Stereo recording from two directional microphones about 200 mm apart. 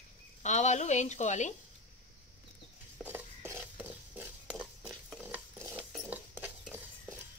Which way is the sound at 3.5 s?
5° right (ahead or behind).